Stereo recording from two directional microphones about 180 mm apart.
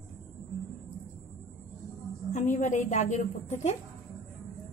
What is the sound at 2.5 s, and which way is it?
A woman's voice, 45° left (ahead or behind).